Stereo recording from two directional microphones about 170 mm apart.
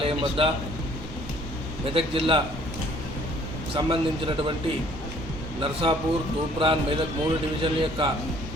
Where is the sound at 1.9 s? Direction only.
30° right (ahead or behind).